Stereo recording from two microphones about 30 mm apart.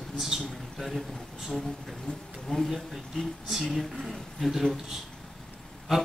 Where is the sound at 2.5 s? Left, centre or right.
Left.